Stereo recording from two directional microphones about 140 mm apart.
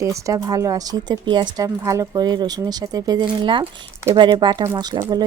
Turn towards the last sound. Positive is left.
turn(degrees=-25)  # may be behind; listen again after turning